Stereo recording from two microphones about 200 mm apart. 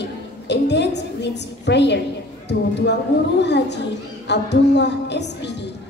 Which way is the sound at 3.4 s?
60° left (ahead or behind).